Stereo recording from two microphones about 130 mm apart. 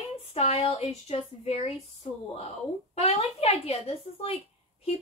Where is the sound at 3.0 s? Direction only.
50° left (ahead or behind).